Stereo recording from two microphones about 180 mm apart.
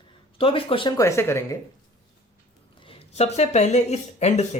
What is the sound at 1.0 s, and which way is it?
Speech, 15° left (ahead or behind).